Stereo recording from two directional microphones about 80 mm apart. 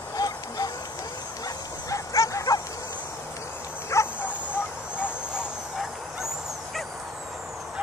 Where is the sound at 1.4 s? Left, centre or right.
Left.